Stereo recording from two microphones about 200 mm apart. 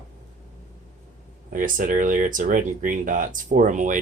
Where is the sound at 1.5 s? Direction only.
40° right (ahead or behind).